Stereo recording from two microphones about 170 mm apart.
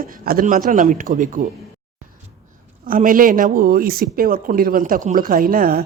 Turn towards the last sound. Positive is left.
turn(degrees=-60)  # may be behind; listen again after turning